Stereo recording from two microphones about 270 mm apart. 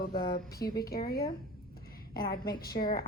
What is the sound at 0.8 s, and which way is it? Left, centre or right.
A woman's voice, left.